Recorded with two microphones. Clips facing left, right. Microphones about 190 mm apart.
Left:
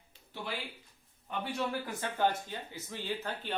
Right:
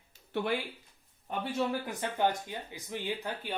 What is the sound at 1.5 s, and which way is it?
Speech, 20° right (ahead or behind).